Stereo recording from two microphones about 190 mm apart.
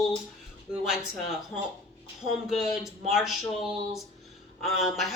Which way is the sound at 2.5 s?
Centre (ahead or behind).